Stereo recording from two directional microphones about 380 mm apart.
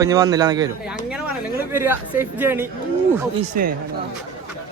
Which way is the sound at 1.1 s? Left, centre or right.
Centre.